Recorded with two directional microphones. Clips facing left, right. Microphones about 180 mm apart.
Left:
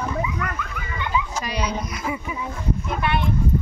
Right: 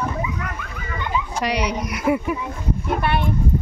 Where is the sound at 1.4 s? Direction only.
70° right (ahead or behind); by 3.2 s 55° right (ahead or behind).